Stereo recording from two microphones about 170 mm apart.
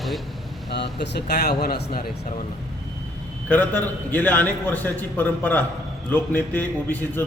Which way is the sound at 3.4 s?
10° left (ahead or behind).